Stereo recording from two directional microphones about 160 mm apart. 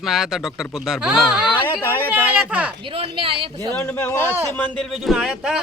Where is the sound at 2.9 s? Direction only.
35° right (ahead or behind).